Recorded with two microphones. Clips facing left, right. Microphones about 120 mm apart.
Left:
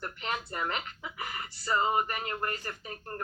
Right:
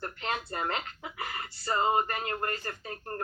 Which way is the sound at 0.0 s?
30° right (ahead or behind).